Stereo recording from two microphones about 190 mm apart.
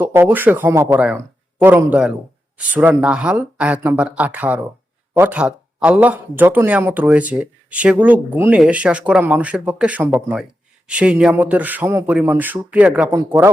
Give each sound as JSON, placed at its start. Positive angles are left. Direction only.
{"t": 0.0, "sound": "speech", "side_deg": -10}